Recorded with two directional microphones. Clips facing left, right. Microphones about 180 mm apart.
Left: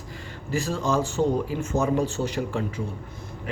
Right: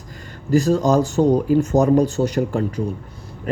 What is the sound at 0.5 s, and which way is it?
Speech, 40° right (ahead or behind).